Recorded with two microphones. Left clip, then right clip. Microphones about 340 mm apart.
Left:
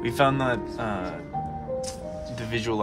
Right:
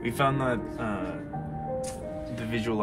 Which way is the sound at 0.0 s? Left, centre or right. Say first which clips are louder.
Left 4 dB; left.